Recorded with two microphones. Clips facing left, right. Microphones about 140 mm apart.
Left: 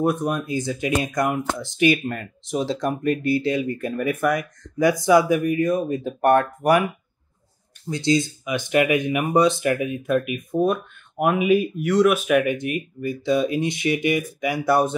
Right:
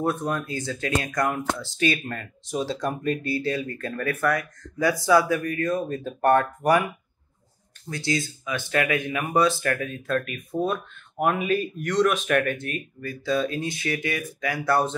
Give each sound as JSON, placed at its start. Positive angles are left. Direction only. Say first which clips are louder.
{"t": 0.0, "sound": "speech", "louder": "left 4 dB", "side_deg": 15}
{"t": 7.9, "sound": "speech", "louder": "left 7 dB", "side_deg": 20}